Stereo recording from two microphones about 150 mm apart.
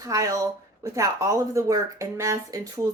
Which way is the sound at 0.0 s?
20° right (ahead or behind).